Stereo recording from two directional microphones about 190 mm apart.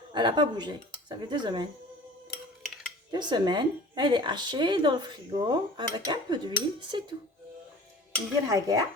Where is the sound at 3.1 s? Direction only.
25° right (ahead or behind).